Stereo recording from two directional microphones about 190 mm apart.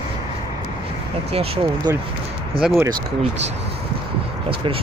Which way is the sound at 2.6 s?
5° right (ahead or behind).